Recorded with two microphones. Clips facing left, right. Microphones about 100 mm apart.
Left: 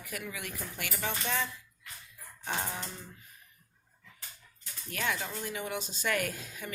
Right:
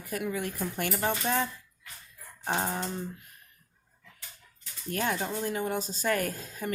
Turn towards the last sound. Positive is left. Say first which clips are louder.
# right 3 dB
turn(degrees=-40)  # may be behind; listen again after turning